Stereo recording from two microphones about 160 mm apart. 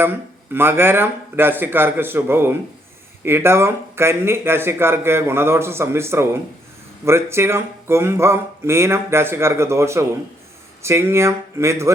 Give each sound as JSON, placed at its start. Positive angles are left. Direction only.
{"t": 0.5, "sound": "speech", "side_deg": -15}